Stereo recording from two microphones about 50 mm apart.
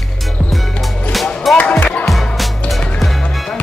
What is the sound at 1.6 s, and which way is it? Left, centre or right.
Music, left.